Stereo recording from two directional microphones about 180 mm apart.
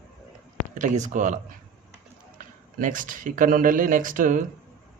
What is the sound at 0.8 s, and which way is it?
A man's voice, 45° right (ahead or behind).